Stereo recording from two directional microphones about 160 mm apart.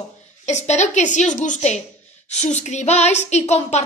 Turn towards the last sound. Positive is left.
turn(degrees=40)  # may be behind; listen again after turning